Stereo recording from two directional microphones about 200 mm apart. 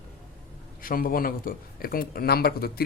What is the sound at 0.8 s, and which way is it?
Speech, 45° left (ahead or behind).